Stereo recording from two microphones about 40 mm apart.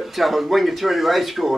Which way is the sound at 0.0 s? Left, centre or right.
Centre.